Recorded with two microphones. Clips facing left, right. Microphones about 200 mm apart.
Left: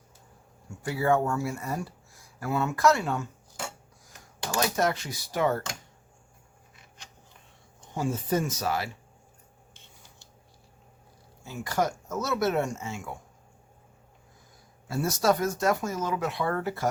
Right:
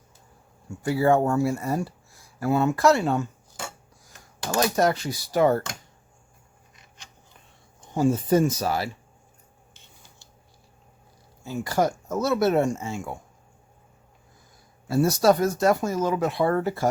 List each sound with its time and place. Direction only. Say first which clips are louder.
0.8 s speech: right 5 dB; 30° right (ahead or behind)
4.5 s speech: right 5 dB; 35° right (ahead or behind)
7.9 s speech: right 7 dB; 35° right (ahead or behind)
11.4 s speech: right 4 dB; 30° right (ahead or behind)
14.8 s speech: right 6 dB; 35° right (ahead or behind)